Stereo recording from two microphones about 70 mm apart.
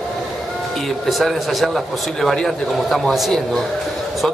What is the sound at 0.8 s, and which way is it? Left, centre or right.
A man's voice, centre.